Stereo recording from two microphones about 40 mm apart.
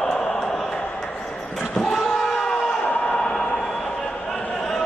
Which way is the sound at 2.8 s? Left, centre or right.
Left.